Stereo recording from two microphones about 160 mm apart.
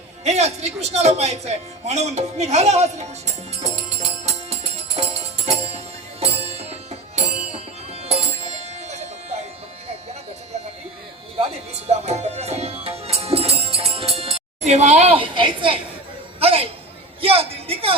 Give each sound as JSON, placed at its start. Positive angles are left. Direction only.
{"t": 0.3, "sound": "speech", "side_deg": -40}
{"t": 3.5, "sound": "music", "side_deg": -40}
{"t": 11.3, "sound": "music", "side_deg": -40}
{"t": 16.4, "sound": "chatter", "side_deg": -35}
{"t": 17.2, "sound": "a sound", "side_deg": -35}